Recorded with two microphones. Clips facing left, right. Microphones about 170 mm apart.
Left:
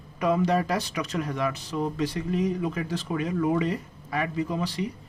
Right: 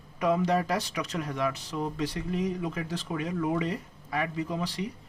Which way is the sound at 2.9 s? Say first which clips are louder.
Left 4 dB; 90° left.